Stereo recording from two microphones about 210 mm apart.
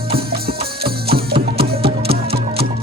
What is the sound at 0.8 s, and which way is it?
Music, 50° right (ahead or behind).